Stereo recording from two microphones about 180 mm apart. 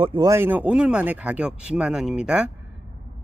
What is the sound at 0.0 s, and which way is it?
Speech, 30° right (ahead or behind).